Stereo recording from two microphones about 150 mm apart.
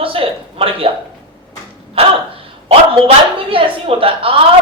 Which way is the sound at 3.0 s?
40° right (ahead or behind).